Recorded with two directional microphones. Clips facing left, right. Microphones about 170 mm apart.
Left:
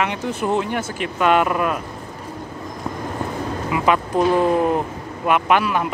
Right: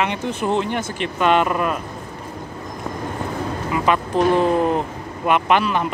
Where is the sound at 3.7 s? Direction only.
10° left (ahead or behind).